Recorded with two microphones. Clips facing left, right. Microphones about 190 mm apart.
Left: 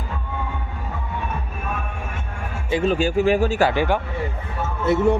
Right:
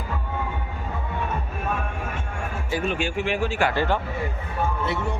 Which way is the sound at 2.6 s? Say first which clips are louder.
Left 6 dB; 25° left (ahead or behind).